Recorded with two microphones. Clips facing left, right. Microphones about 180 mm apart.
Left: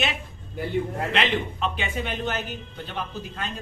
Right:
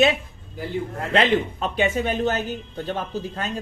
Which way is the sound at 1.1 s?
45° right (ahead or behind).